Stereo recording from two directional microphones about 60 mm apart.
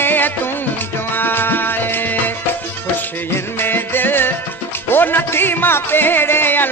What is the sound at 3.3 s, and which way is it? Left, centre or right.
Music, left.